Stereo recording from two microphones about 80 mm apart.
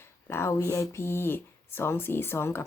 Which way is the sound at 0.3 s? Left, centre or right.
Left.